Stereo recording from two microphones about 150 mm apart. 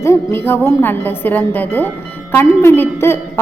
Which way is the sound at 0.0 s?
15° left (ahead or behind).